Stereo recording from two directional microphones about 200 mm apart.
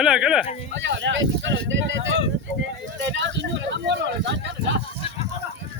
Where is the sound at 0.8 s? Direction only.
60° right (ahead or behind).